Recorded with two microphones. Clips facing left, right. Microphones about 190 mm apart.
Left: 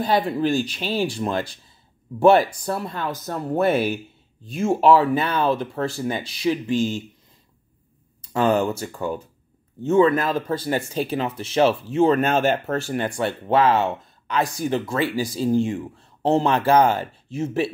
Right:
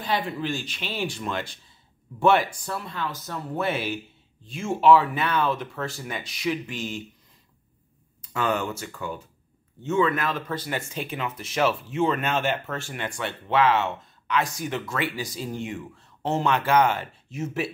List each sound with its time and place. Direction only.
0.0 s speech: 40° left (ahead or behind)
8.2 s speech: 35° left (ahead or behind)